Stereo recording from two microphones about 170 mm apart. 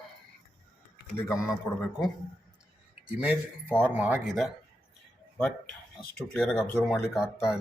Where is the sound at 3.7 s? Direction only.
10° right (ahead or behind).